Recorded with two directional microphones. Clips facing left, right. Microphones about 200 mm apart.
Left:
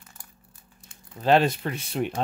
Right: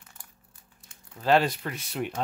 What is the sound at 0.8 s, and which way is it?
Speech, 25° left (ahead or behind).